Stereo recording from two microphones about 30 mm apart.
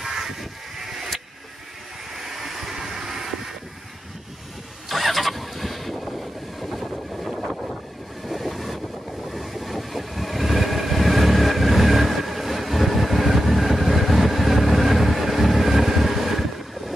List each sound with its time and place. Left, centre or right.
0.4 s a sound: centre
2.1 s vehicle: centre
2.7 s train: centre
4.8 s vehicle: centre
8.3 s train: centre